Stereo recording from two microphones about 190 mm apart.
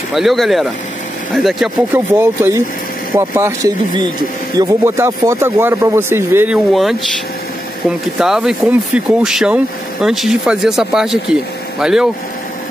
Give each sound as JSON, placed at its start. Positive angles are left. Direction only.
{"t": 0.1, "sound": "speech", "side_deg": 0}
{"t": 2.1, "sound": "speech", "side_deg": -10}
{"t": 8.2, "sound": "speech", "side_deg": -5}